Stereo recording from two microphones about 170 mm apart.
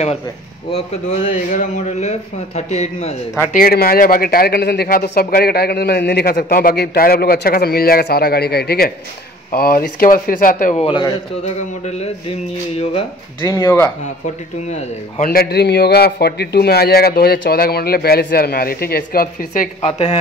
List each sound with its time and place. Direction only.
0.7 s speech: 40° left (ahead or behind)
3.5 s a man's voice: 60° left (ahead or behind)
6.3 s a man's voice: 55° left (ahead or behind)
10.8 s speech: 30° left (ahead or behind)
11.4 s speech: 40° left (ahead or behind)
12.9 s speech: 25° left (ahead or behind)
15.2 s a man's voice: 65° left (ahead or behind)
19.8 s speech: 40° left (ahead or behind)